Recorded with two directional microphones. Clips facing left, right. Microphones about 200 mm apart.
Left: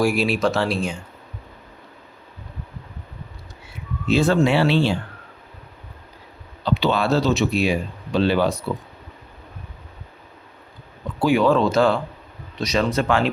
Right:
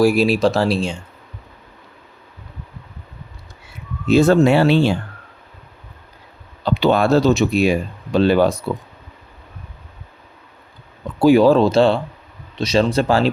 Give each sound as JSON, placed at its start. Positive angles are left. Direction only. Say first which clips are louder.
{"t": 0.0, "sound": "speech", "louder": "right 5 dB", "side_deg": -35}
{"t": 4.1, "sound": "speech", "louder": "right 5 dB", "side_deg": -45}
{"t": 6.7, "sound": "speech", "louder": "right 5 dB", "side_deg": -50}
{"t": 11.2, "sound": "speech", "louder": "right 6 dB", "side_deg": -35}